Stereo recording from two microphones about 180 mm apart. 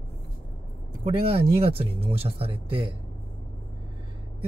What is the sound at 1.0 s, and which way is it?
Speech, 30° right (ahead or behind).